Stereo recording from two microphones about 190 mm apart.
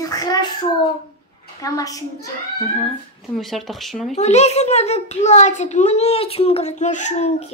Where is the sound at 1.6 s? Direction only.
20° left (ahead or behind).